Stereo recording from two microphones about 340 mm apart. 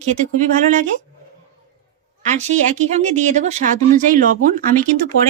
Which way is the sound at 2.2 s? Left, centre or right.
Right.